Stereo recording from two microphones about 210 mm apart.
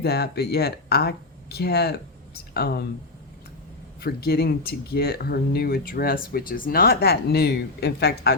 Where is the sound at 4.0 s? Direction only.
50° left (ahead or behind).